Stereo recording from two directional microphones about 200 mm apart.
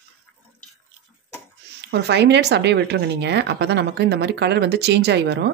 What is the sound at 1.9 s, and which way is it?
A woman's voice, 60° right (ahead or behind).